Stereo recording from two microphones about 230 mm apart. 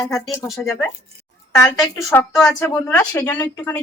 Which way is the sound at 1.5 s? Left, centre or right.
Centre.